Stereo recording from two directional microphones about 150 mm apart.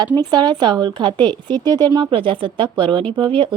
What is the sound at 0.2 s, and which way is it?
A woman's voice, 30° right (ahead or behind).